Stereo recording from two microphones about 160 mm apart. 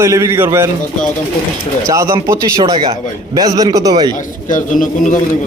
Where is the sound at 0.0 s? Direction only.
15° right (ahead or behind).